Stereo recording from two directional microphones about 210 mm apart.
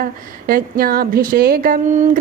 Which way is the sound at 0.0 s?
45° right (ahead or behind).